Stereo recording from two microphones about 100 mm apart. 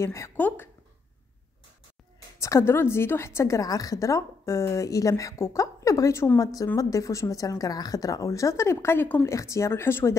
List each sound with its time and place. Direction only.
0.0 s speech: 30° left (ahead or behind)
0.4 s speech: 20° left (ahead or behind)
2.4 s a woman's voice: 30° left (ahead or behind)